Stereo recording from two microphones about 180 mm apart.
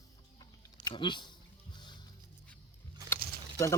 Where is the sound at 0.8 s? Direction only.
25° left (ahead or behind).